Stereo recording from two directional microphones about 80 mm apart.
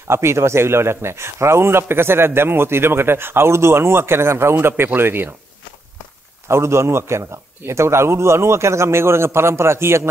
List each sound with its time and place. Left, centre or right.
0.1 s a man's voice: right
6.4 s a man's voice: right